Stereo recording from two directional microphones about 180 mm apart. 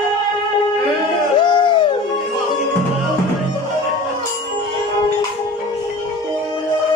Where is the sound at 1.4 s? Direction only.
25° left (ahead or behind).